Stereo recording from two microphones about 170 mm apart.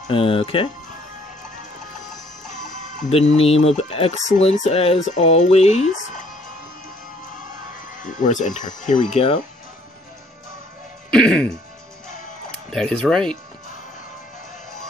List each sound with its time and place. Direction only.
0.1 s speech: 30° left (ahead or behind)
3.1 s speech: 40° left (ahead or behind)
8.0 s speech: 50° left (ahead or behind)
11.1 s music: 5° left (ahead or behind)
12.4 s speech: 5° left (ahead or behind)